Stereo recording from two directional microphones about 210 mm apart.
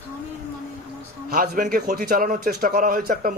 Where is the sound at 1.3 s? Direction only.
40° right (ahead or behind).